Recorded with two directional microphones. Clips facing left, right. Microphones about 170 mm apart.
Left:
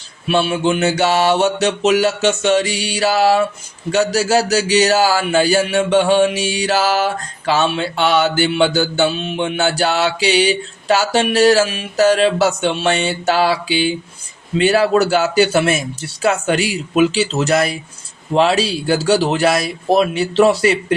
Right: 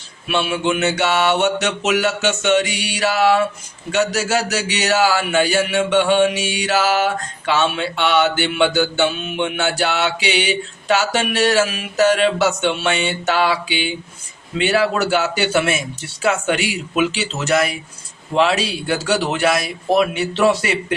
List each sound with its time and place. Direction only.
0.3 s speech: 35° left (ahead or behind)